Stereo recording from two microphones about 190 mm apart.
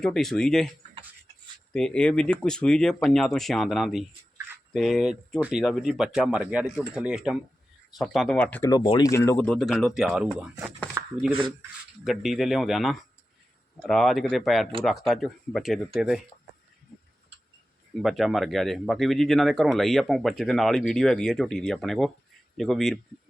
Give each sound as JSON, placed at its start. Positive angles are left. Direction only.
{"t": 0.0, "sound": "speech", "side_deg": 5}
{"t": 1.7, "sound": "speech", "side_deg": 5}
{"t": 11.3, "sound": "speech", "side_deg": -25}
{"t": 12.0, "sound": "speech", "side_deg": 0}
{"t": 18.0, "sound": "speech", "side_deg": 0}